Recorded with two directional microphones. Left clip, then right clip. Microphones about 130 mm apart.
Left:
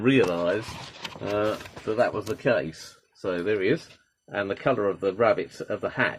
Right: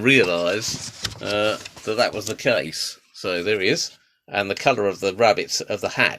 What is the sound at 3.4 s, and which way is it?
Speech, 25° right (ahead or behind).